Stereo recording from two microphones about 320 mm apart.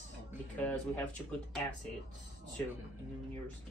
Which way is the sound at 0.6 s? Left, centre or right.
Centre.